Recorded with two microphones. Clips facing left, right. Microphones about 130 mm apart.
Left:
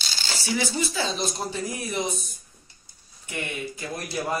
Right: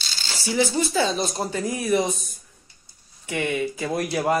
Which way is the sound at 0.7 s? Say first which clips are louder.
Right 5 dB; 50° right (ahead or behind).